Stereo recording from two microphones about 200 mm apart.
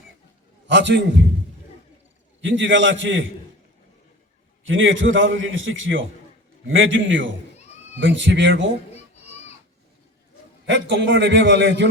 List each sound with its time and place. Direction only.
0.7 s a man's voice: 65° right (ahead or behind)
2.4 s a man's voice: 65° right (ahead or behind)
4.6 s a man's voice: 75° right (ahead or behind)
7.5 s a sound: 35° left (ahead or behind)
7.9 s a man's voice: 65° right (ahead or behind)
8.9 s children playing: 30° left (ahead or behind)
10.7 s a man's voice: 65° right (ahead or behind)